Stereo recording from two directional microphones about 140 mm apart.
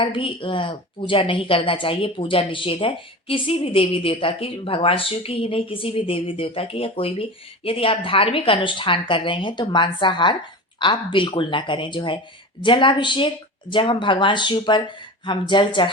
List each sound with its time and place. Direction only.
0.0 s a woman's voice: 40° left (ahead or behind)